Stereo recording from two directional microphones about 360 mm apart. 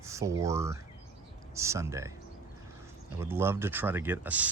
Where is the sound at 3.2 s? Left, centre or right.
Centre.